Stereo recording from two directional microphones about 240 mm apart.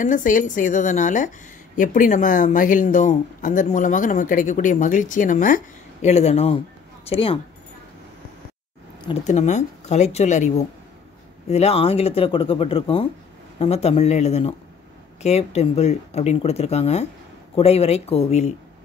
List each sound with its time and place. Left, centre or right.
0.0 s speech: left
9.0 s speech: left
11.5 s speech: left